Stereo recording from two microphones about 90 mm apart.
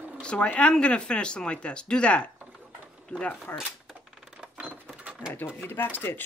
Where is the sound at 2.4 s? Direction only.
15° right (ahead or behind).